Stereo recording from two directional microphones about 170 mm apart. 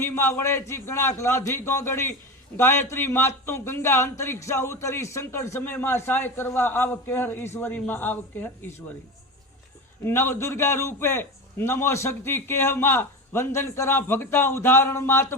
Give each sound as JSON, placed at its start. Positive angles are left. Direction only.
{"t": 0.0, "sound": "a man's voice", "side_deg": 15}
{"t": 10.0, "sound": "a man's voice", "side_deg": 15}